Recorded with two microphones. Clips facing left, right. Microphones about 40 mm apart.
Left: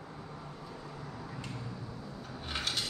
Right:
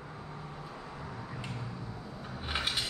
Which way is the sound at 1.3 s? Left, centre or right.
Centre.